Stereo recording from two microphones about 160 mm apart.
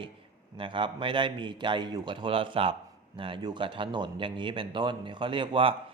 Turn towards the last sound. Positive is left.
turn(degrees=-35)  # may be behind; listen again after turning